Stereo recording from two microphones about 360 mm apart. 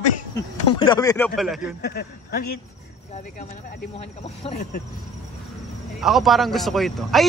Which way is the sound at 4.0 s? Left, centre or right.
Centre.